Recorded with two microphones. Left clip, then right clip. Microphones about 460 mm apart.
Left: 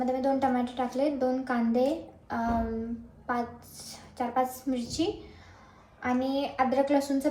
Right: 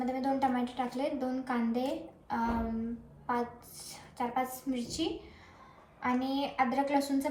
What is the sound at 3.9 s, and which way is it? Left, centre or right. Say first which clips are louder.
A woman's voice: left 3 dB; centre.